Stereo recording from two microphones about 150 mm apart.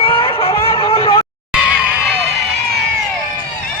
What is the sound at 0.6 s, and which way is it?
Vehicle, 40° left (ahead or behind).